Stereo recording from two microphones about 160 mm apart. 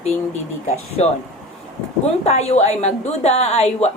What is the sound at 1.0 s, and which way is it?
Speech, 40° left (ahead or behind).